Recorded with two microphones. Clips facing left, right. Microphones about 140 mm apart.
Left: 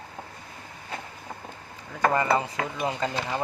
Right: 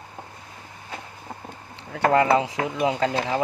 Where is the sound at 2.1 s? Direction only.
85° right.